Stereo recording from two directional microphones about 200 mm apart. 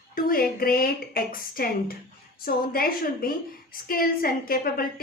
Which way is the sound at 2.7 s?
50° left (ahead or behind).